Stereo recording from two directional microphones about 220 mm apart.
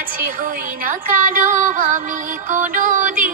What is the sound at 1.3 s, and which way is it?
Music, 40° right (ahead or behind).